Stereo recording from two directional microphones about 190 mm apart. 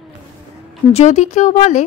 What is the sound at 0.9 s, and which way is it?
Speech, 35° left (ahead or behind).